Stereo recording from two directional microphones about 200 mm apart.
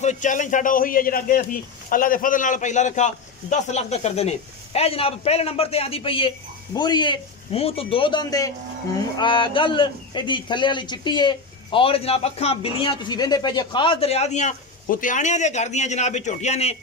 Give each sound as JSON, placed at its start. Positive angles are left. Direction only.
{"t": 0.0, "sound": "a man's voice", "side_deg": 35}